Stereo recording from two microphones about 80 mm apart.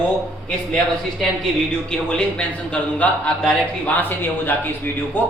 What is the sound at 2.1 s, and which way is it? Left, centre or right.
A man's voice, centre.